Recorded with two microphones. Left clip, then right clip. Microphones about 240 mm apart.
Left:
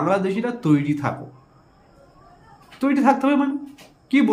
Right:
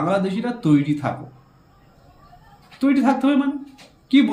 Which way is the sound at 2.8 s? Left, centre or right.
Centre.